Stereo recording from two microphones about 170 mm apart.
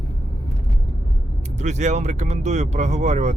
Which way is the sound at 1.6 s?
40° right (ahead or behind).